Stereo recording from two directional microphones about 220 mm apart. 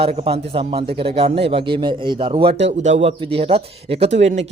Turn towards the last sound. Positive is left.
turn(degrees=-30)  # may be behind; listen again after turning